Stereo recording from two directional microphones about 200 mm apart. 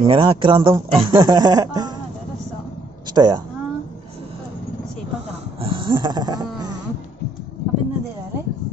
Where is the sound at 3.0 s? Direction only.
20° right (ahead or behind).